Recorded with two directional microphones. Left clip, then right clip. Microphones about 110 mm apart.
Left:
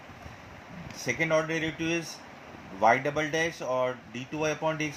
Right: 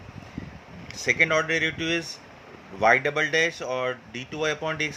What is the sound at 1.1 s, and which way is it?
Speech, 65° right (ahead or behind).